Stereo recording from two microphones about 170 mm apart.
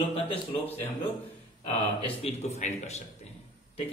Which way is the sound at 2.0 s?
40° left (ahead or behind).